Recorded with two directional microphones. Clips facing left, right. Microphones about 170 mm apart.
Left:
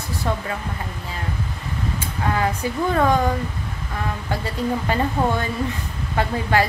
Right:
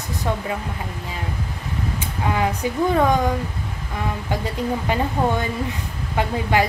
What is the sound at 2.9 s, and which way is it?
Speech, 15° right (ahead or behind).